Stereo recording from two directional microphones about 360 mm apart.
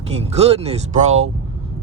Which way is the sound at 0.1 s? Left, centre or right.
Centre.